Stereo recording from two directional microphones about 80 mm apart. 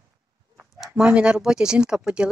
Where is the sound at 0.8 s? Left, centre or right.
Centre.